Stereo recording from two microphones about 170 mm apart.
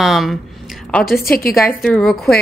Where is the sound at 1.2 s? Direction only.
60° left (ahead or behind).